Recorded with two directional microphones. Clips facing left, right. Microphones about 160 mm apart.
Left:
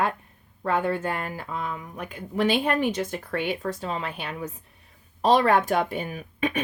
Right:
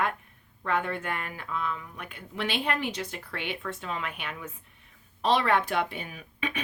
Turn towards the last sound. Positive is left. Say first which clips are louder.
# left 7 dB
turn(degrees=45)  # may be behind; listen again after turning